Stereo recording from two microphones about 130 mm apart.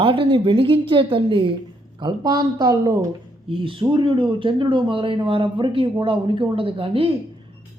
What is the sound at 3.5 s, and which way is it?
Speech, 40° right (ahead or behind).